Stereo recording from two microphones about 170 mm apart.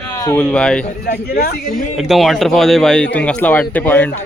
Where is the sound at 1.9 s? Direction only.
Centre (ahead or behind).